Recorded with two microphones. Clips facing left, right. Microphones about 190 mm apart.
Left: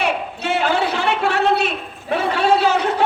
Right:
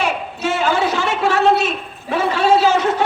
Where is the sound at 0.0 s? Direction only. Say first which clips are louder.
Right 1 dB; 60° left (ahead or behind).